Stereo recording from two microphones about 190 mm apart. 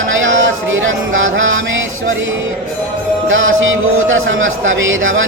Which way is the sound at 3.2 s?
90° right.